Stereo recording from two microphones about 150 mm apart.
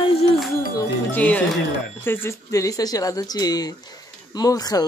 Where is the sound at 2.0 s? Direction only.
15° left (ahead or behind).